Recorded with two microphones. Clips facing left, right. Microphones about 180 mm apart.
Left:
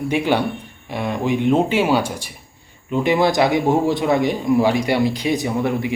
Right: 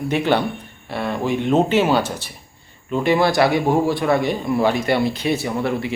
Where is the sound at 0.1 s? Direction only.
10° left (ahead or behind).